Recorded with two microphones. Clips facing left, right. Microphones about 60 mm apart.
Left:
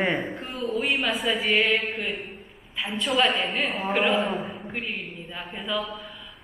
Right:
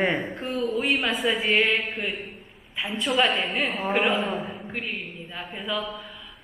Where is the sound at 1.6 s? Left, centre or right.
Right.